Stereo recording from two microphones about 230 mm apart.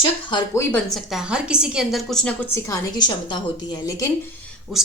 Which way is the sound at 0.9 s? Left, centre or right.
Centre.